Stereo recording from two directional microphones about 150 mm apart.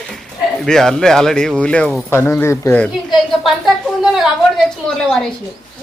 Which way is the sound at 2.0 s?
15° left (ahead or behind).